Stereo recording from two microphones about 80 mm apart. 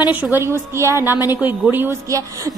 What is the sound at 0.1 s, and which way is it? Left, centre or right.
Speech, right.